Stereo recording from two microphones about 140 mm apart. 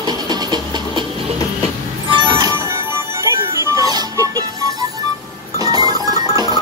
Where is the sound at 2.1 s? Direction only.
35° right (ahead or behind).